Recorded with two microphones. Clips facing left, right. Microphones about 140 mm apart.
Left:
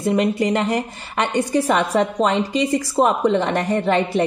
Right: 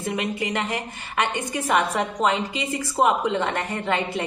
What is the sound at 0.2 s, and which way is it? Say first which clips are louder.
A woman's voice: left 8 dB; 40° left (ahead or behind).